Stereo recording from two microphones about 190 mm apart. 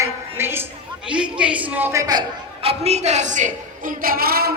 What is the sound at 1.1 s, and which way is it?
A woman's voice, 5° right (ahead or behind).